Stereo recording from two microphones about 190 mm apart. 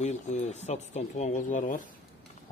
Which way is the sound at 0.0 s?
35° left (ahead or behind).